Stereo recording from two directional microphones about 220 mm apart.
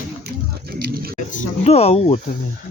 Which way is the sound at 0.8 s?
45° right (ahead or behind).